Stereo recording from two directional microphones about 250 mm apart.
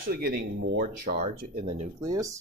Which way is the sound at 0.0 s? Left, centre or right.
Right.